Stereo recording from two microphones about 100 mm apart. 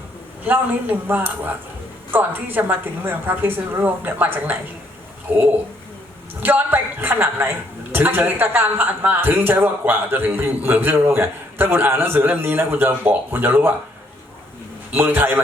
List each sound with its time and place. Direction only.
0.4 s a man's voice: 15° right (ahead or behind)
14.9 s a man's voice: 20° right (ahead or behind)